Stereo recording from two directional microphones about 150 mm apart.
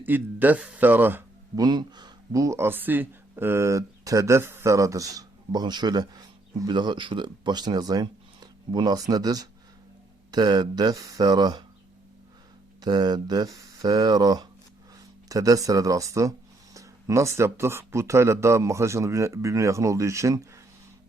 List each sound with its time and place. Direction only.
0.0 s a man's voice: 10° right (ahead or behind)
1.5 s speech: 30° right (ahead or behind)
12.8 s speech: 25° right (ahead or behind)